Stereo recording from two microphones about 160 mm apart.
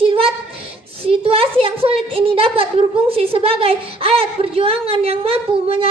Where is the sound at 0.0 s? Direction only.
35° right (ahead or behind).